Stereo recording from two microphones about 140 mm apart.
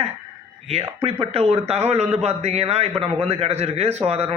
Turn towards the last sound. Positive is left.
turn(degrees=-45)  # may be behind; listen again after turning